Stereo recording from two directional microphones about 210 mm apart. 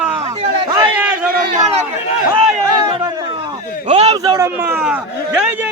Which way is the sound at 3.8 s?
30° right (ahead or behind).